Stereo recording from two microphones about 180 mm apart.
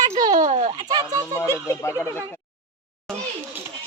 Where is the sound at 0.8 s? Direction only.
20° right (ahead or behind).